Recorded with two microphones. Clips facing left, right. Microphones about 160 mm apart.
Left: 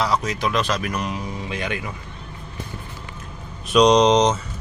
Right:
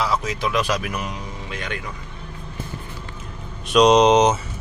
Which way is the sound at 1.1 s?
10° left (ahead or behind).